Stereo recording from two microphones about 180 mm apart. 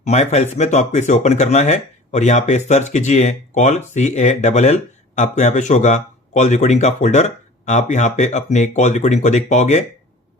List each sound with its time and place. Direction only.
0.0 s speech: 40° left (ahead or behind)